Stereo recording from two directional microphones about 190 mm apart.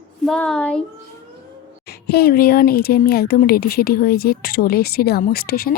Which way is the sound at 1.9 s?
55° left (ahead or behind).